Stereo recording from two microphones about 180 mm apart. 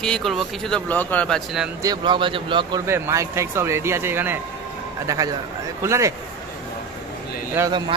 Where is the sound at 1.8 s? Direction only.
25° right (ahead or behind).